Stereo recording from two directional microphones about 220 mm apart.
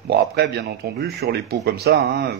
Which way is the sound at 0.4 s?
45° right (ahead or behind).